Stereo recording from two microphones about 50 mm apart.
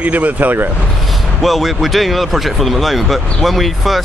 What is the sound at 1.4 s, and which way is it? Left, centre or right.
Speech, centre.